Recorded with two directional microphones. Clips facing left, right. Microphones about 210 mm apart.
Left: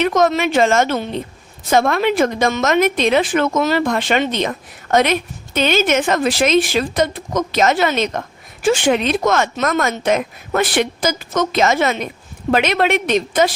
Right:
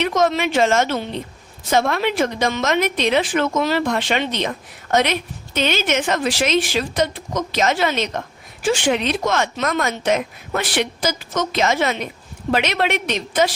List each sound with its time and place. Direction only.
0.0 s speech: 50° left (ahead or behind)